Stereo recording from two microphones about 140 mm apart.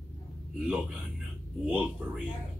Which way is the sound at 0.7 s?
5° right (ahead or behind).